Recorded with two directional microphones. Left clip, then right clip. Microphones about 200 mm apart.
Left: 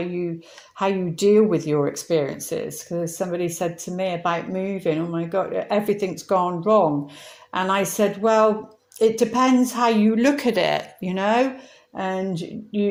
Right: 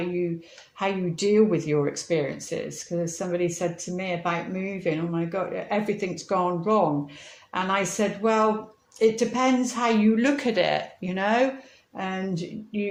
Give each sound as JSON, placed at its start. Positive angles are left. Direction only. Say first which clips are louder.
{"t": 0.8, "sound": "speech", "louder": "left 5 dB", "side_deg": 35}